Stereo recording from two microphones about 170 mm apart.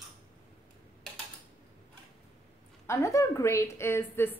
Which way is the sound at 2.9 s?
20° left (ahead or behind).